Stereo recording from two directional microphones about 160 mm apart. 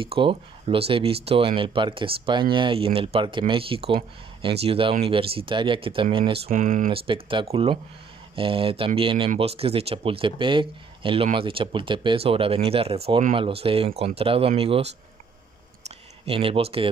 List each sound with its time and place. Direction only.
0.0 s speech: 35° right (ahead or behind)
6.5 s speech: 60° right (ahead or behind)
6.9 s speech: 35° right (ahead or behind)
16.3 s speech: 35° right (ahead or behind)